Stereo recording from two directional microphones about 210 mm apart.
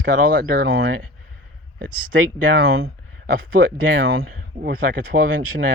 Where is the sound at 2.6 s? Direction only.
45° right (ahead or behind).